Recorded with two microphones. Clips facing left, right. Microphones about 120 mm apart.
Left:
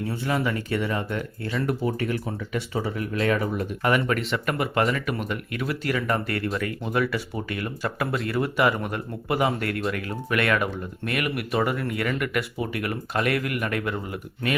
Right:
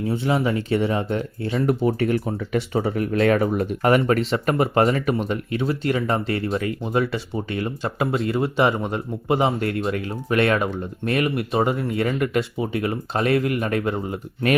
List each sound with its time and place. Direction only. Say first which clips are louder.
0.1 s speech: right 5 dB; 25° right (ahead or behind)
2.5 s speech: right 6 dB; 55° right (ahead or behind)
3.8 s speech: right 5 dB; 35° right (ahead or behind)